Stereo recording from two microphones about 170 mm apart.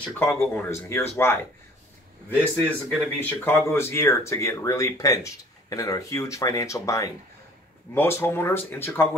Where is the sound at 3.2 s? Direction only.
10° left (ahead or behind).